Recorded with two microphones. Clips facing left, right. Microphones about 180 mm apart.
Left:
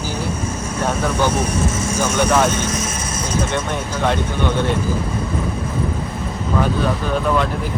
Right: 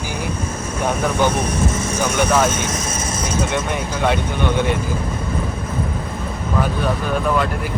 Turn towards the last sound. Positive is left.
turn(degrees=-5)  # may be behind; listen again after turning